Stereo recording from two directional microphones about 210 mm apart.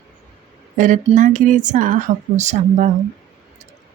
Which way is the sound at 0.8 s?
35° right (ahead or behind).